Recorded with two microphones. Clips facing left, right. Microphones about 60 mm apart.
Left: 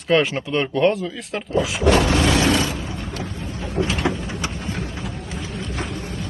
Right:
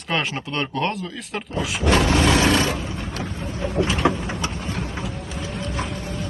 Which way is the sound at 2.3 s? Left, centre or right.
Right.